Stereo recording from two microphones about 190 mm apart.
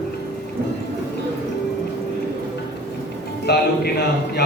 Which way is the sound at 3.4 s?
60° left (ahead or behind).